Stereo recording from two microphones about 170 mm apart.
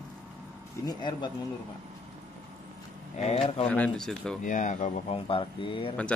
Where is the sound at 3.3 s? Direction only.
35° left (ahead or behind).